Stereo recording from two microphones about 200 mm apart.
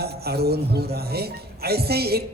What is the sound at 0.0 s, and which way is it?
A man's voice, 50° right (ahead or behind).